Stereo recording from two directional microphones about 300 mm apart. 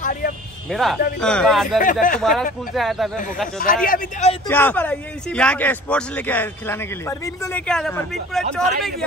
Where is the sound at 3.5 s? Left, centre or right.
Left.